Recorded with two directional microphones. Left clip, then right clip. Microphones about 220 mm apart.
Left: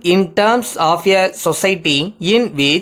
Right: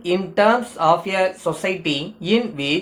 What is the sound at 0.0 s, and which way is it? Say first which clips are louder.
Speech: left 4 dB; 50° left (ahead or behind).